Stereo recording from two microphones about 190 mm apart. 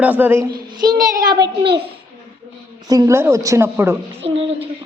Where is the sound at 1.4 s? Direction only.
60° right (ahead or behind).